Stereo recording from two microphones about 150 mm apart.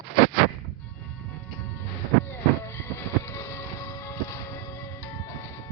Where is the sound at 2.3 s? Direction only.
15° left (ahead or behind).